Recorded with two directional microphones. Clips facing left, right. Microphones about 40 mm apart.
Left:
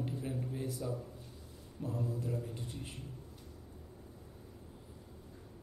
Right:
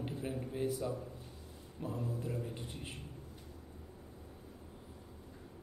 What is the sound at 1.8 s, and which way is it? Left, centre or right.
A man's voice, right.